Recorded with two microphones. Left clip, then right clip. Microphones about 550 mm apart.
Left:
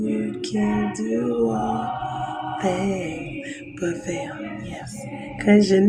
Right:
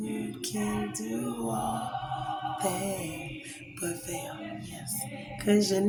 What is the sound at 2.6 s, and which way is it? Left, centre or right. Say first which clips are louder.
Speech: left 8 dB; right.